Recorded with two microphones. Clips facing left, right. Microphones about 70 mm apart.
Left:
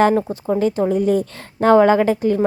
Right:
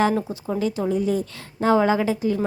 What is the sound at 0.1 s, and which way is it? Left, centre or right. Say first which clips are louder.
A woman's voice: left 6 dB; left.